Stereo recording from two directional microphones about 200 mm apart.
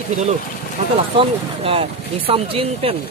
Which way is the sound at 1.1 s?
30° right (ahead or behind).